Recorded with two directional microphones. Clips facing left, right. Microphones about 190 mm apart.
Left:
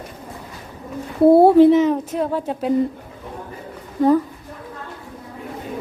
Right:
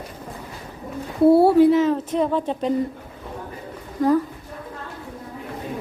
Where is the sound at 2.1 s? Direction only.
5° left (ahead or behind).